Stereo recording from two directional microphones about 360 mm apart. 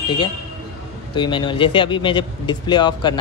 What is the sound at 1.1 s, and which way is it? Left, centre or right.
Speech, centre.